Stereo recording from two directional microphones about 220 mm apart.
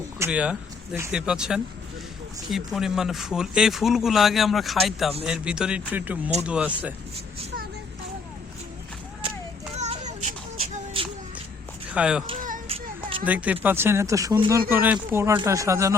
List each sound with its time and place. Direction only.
0.2 s speech: 5° right (ahead or behind)
9.7 s child singing: 30° right (ahead or behind)
11.9 s speech: 5° right (ahead or behind)
12.5 s child singing: 25° right (ahead or behind)
13.2 s speech: 5° right (ahead or behind)